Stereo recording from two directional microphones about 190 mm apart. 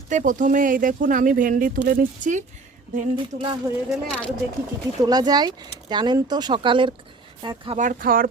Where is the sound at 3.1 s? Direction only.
25° right (ahead or behind).